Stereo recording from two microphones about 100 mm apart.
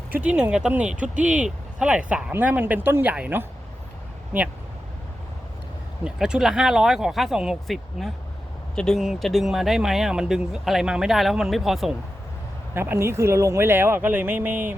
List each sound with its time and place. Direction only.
0.1 s speech: 15° right (ahead or behind)
6.1 s speech: 5° right (ahead or behind)
12.7 s speech: 25° right (ahead or behind)